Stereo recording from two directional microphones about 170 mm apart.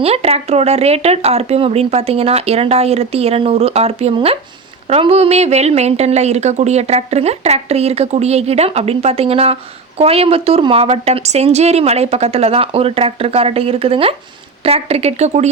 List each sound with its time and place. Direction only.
0.0 s speech: 35° right (ahead or behind)